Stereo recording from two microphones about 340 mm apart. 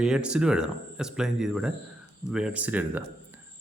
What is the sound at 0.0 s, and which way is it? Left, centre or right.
A man's voice, centre.